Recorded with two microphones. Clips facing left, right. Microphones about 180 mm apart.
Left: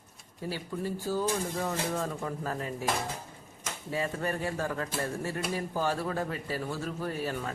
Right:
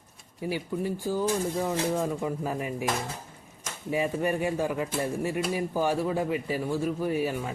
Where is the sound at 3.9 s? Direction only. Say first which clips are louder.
Right 5 dB; 15° right (ahead or behind).